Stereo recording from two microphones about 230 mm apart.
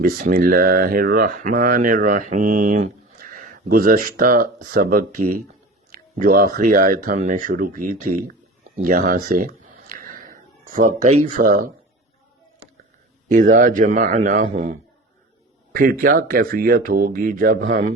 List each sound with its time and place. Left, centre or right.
0.0 s speech: right
9.8 s a sound: right
13.2 s speech: right